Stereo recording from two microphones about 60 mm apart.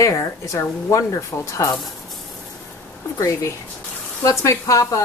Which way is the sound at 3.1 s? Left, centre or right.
Left.